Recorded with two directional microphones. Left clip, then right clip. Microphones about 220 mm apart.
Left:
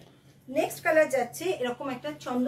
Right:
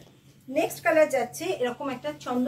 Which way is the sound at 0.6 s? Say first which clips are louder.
Right 2 dB; 5° left (ahead or behind).